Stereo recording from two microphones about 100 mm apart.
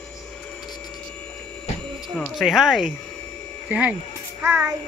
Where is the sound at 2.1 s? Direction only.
10° left (ahead or behind).